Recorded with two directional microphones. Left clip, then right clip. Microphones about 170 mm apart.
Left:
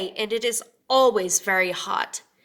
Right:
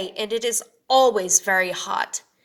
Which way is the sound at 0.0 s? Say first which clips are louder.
Even; 10° left (ahead or behind).